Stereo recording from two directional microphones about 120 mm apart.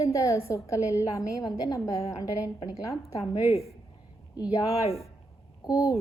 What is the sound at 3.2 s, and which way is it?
Speech, 50° left (ahead or behind).